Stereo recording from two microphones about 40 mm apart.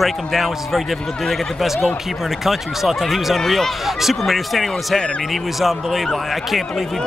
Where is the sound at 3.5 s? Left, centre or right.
Centre.